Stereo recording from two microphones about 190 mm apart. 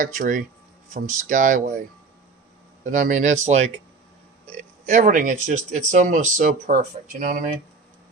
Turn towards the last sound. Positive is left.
turn(degrees=-45)  # may be behind; listen again after turning